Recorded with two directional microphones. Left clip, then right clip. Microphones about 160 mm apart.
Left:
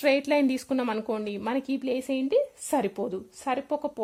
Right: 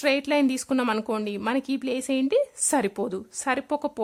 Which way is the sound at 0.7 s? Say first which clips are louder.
Right 3 dB; 15° right (ahead or behind).